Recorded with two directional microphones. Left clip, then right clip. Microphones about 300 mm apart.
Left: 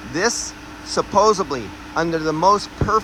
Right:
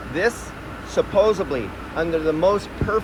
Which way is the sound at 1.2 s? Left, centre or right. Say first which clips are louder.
Left 3 dB; left.